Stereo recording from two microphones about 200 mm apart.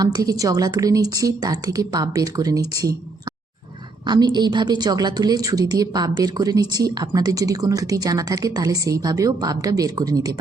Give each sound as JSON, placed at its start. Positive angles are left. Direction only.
{"t": 0.0, "sound": "a woman's voice", "side_deg": -20}
{"t": 4.0, "sound": "a woman's voice", "side_deg": -20}